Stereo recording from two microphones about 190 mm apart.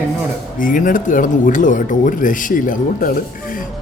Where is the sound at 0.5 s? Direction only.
45° left (ahead or behind).